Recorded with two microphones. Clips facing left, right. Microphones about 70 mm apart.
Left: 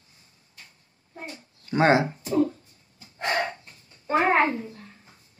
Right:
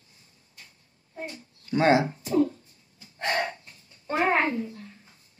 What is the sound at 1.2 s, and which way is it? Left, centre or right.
Speech, left.